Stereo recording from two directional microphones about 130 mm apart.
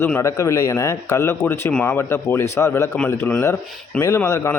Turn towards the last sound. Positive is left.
turn(degrees=25)  # may be behind; listen again after turning